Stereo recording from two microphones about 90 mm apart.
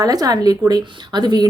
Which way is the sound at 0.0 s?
45° right (ahead or behind).